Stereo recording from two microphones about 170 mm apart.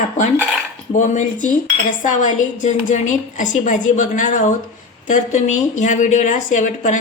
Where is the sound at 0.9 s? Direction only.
45° left (ahead or behind).